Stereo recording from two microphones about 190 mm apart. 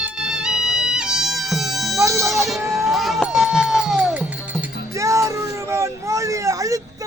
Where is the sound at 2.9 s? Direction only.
Centre (ahead or behind).